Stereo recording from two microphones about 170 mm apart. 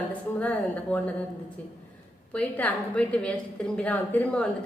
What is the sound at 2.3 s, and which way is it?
A woman's voice, 10° left (ahead or behind).